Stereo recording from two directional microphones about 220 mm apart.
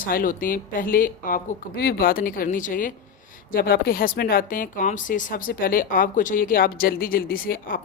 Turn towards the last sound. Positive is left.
turn(degrees=40)  # may be behind; listen again after turning